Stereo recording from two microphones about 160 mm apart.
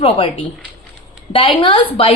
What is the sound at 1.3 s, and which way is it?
Speech, 30° left (ahead or behind).